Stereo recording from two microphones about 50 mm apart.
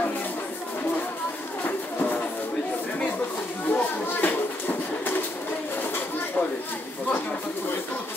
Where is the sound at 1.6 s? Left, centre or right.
Left.